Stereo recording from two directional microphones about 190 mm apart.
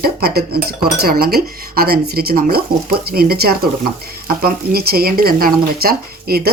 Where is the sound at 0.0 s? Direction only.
55° right (ahead or behind).